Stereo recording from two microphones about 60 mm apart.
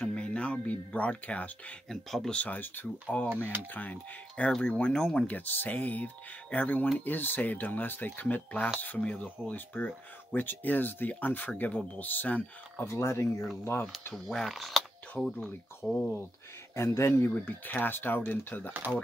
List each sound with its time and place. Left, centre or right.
0.0 s speech: centre
1.9 s speech: centre
2.3 s speech: left
5.1 s speech: left
12.8 s speech: left
14.1 s speech: centre
15.2 s speech: centre
15.8 s speech: left
16.7 s speech: left
17.3 s speech: left